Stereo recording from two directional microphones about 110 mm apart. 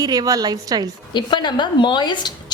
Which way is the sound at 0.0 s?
35° right (ahead or behind).